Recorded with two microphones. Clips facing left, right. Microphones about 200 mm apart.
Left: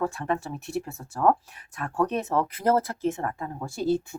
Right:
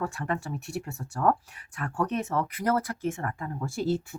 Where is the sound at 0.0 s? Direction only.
25° left (ahead or behind).